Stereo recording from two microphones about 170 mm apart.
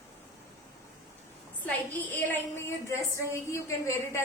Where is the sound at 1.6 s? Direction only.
10° left (ahead or behind).